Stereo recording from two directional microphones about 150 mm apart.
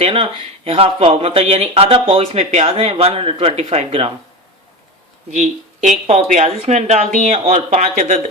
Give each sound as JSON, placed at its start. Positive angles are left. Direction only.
{"t": 0.0, "sound": "speech", "side_deg": -40}
{"t": 5.3, "sound": "speech", "side_deg": -50}
{"t": 7.7, "sound": "speech", "side_deg": -60}